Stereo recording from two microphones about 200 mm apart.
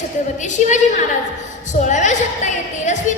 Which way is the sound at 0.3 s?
35° left (ahead or behind).